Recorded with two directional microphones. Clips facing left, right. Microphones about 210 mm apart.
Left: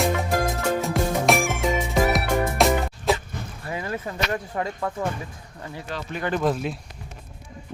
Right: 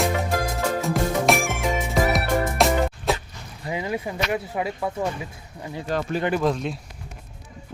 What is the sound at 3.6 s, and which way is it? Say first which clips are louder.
Speech: right 3 dB; 15° right (ahead or behind).